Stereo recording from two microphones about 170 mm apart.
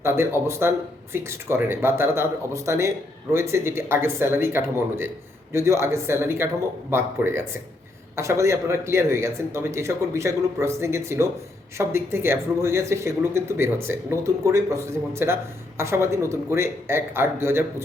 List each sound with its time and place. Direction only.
0.0 s speech: 15° right (ahead or behind)